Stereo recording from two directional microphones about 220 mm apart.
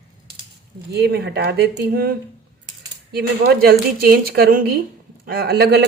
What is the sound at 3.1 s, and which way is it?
Speech, 45° right (ahead or behind).